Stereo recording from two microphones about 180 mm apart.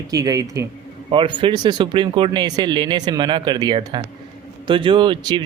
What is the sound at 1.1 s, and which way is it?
Speech, 30° right (ahead or behind).